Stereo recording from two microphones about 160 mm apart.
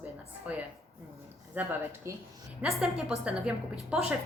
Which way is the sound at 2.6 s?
5° right (ahead or behind).